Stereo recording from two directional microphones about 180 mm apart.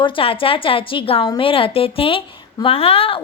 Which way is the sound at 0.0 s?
30° left (ahead or behind).